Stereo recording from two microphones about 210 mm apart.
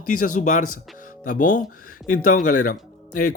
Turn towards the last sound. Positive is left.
turn(degrees=40)  # may be behind; listen again after turning